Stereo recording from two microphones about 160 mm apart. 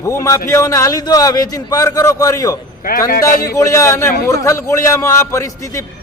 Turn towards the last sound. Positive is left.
turn(degrees=20)  # may be behind; listen again after turning